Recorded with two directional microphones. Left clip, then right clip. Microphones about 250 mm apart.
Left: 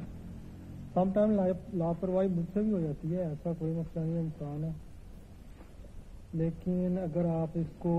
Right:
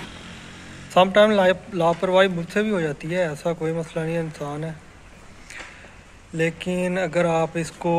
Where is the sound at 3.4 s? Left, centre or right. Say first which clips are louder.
Right 12 dB; right.